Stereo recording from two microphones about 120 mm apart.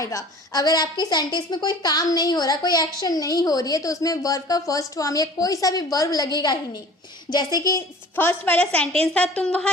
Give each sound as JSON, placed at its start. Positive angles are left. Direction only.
{"t": 0.0, "sound": "a woman's voice", "side_deg": 30}
{"t": 8.1, "sound": "a woman's voice", "side_deg": 15}